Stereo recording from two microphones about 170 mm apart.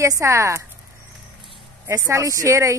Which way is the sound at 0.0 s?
20° right (ahead or behind).